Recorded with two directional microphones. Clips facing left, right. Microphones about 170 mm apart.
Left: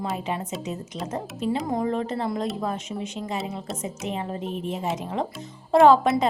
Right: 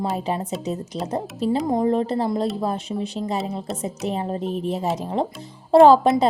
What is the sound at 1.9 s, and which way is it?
A woman's voice, 35° right (ahead or behind).